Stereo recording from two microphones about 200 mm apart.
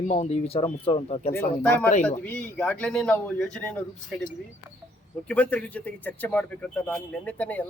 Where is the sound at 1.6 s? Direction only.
5° left (ahead or behind).